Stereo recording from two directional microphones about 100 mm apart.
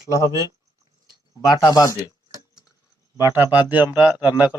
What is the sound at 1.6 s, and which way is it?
Speech, 35° left (ahead or behind).